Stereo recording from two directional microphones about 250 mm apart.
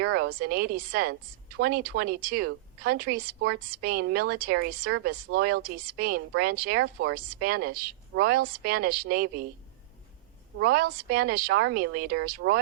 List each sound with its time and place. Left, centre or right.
0.0 s speech: right
10.6 s speech: right